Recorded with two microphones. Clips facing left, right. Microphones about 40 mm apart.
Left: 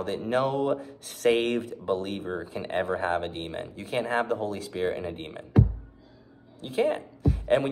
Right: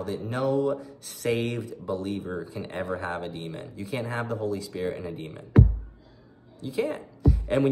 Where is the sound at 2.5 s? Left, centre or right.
Left.